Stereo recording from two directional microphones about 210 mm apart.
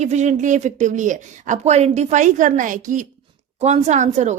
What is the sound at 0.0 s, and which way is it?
A woman's voice, 35° right (ahead or behind).